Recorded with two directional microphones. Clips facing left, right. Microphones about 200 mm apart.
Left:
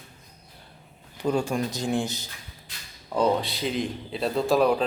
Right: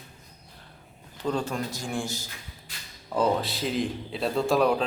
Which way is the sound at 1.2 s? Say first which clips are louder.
Left 3 dB; 10° left (ahead or behind).